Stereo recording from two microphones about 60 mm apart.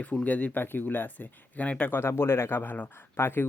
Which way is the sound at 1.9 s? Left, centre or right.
Left.